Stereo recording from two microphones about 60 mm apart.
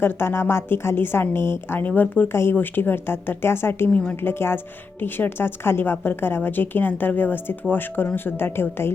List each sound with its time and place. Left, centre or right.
0.0 s speech: left